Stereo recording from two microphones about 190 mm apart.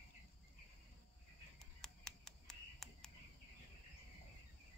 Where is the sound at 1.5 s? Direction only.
5° left (ahead or behind).